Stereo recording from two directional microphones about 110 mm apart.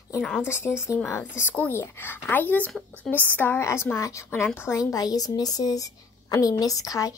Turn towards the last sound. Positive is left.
turn(degrees=30)  # may be behind; listen again after turning